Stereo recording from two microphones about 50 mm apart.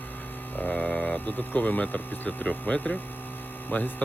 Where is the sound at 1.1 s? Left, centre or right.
Left.